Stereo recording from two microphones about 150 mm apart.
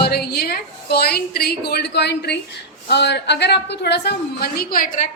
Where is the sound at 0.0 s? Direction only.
90° left.